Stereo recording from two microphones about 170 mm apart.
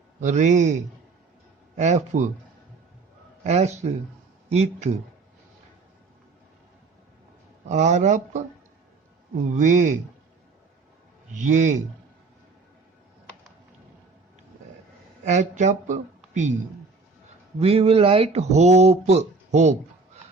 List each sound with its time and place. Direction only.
0.2 s speech: 45° right (ahead or behind)
3.4 s speech: 40° right (ahead or behind)
7.7 s speech: 45° right (ahead or behind)
9.6 s speech: 45° right (ahead or behind)
11.3 s speech: 45° right (ahead or behind)
15.3 s speech: 45° right (ahead or behind)
17.6 s speech: 35° right (ahead or behind)